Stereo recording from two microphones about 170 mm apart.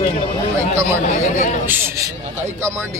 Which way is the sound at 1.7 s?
15° right (ahead or behind).